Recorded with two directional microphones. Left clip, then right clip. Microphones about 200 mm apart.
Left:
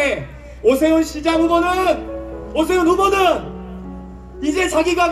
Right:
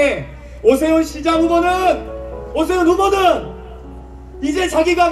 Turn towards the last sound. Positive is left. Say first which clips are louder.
# right 2 dB
turn(degrees=25)  # may be behind; listen again after turning